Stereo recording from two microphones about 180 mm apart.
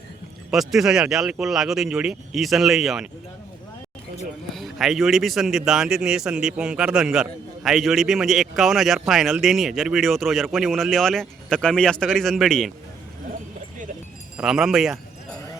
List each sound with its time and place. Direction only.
0.5 s speech: centre (ahead or behind)
4.5 s speech: centre (ahead or behind)
14.3 s speech: 5° right (ahead or behind)